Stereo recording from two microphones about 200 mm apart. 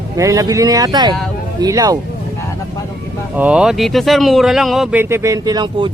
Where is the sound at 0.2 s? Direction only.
15° right (ahead or behind).